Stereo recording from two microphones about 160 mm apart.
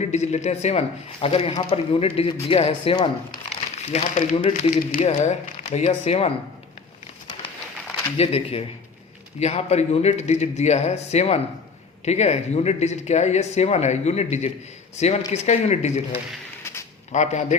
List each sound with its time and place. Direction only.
0.0 s speech: 45° left (ahead or behind)
8.2 s speech: 40° left (ahead or behind)
17.1 s speech: 45° left (ahead or behind)